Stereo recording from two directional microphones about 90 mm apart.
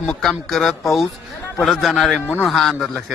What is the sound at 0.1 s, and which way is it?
A man's voice, centre (ahead or behind).